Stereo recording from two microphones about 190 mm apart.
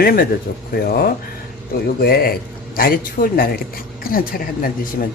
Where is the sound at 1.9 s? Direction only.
50° left (ahead or behind).